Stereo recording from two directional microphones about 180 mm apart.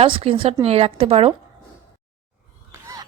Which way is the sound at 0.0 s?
30° right (ahead or behind).